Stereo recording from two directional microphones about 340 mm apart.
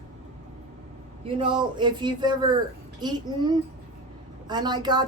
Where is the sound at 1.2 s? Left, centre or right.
Centre.